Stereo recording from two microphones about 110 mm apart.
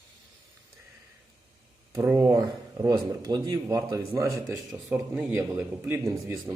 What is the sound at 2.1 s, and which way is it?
Speech, 35° right (ahead or behind).